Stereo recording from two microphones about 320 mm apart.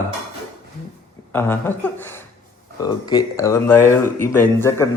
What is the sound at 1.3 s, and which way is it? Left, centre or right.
A man's voice, centre.